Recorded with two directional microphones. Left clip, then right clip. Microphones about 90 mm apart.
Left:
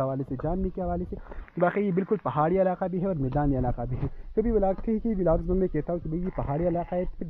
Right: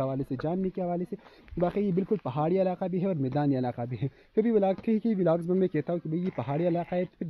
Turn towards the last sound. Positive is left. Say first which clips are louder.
# left 1 dB
turn(degrees=-25)  # may be behind; listen again after turning